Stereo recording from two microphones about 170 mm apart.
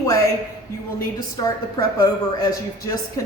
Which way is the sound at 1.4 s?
20° left (ahead or behind).